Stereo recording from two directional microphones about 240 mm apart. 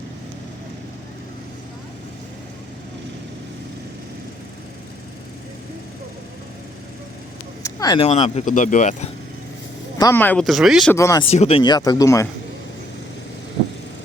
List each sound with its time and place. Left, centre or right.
7.6 s speech: centre; by 9.0 s left
10.0 s speech: centre
10.9 s speech: centre
11.3 s speech: left